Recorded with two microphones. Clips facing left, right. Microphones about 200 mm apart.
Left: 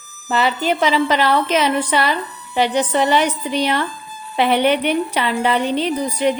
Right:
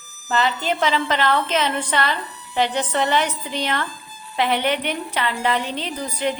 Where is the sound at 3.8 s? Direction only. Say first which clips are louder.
Left 6 dB; 60° left (ahead or behind).